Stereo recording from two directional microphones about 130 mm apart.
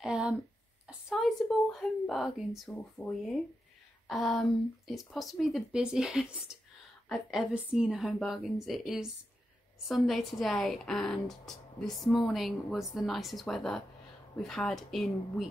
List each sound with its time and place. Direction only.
0.0 s a woman's voice: 5° right (ahead or behind)